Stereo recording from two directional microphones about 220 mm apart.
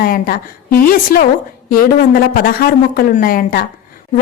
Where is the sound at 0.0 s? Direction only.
40° left (ahead or behind).